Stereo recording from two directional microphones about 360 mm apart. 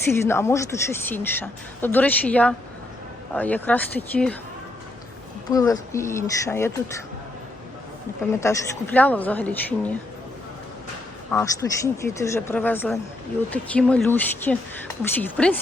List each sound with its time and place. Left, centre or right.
0.3 s a woman's voice: centre
5.5 s speech: centre
8.4 s a woman's voice: centre
11.3 s a woman's voice: centre